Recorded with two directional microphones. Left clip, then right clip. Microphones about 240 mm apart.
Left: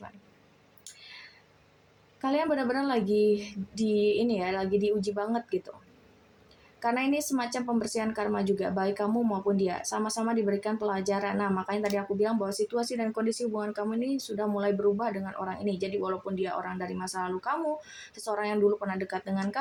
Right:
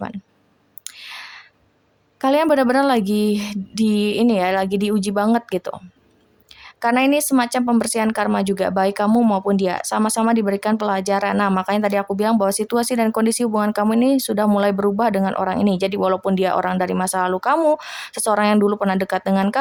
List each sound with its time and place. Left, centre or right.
0.9 s a sound: right
2.2 s speech: right
6.7 s speech: right